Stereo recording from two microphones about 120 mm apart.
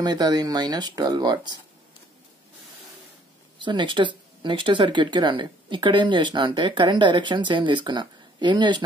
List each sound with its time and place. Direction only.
0.0 s speech: 35° right (ahead or behind)
3.5 s speech: 40° right (ahead or behind)